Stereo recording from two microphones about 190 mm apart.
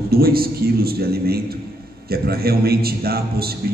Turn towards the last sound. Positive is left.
turn(degrees=-55)  # may be behind; listen again after turning